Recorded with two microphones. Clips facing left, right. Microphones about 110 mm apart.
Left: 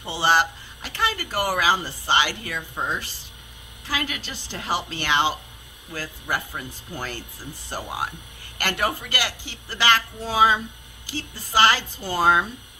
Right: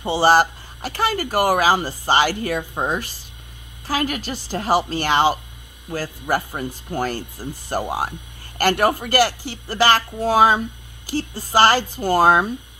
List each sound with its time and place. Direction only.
0.0 s speech: 45° right (ahead or behind)